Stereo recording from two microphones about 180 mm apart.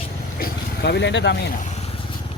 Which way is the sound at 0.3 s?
60° left (ahead or behind).